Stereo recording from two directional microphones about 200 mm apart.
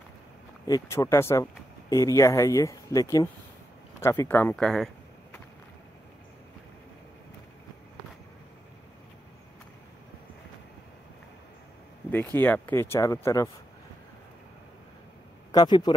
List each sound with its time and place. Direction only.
0.7 s speech: 15° left (ahead or behind)
12.1 s speech: 10° left (ahead or behind)
15.5 s speech: 20° left (ahead or behind)